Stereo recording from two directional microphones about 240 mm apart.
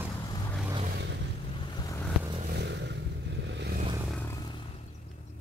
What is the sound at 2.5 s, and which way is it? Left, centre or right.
Vehicle, right.